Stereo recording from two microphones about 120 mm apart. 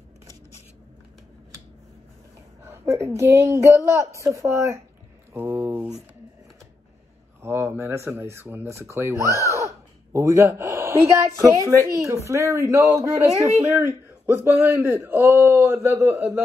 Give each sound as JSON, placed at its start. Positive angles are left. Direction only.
{"t": 2.6, "sound": "a sound", "side_deg": -20}
{"t": 3.2, "sound": "a man's voice", "side_deg": -25}
{"t": 7.4, "sound": "a man's voice", "side_deg": -20}